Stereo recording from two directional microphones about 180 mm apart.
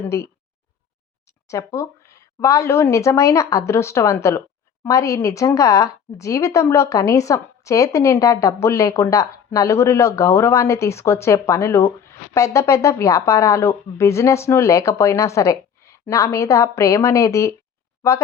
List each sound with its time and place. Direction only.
0.0 s a woman's voice: 15° left (ahead or behind)
1.5 s a woman's voice: 15° left (ahead or behind)